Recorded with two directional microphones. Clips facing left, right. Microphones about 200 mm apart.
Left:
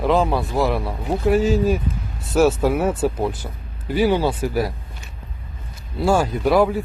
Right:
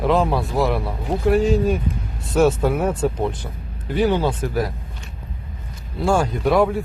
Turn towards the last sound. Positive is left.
turn(degrees=0)  # may be behind; listen again after turning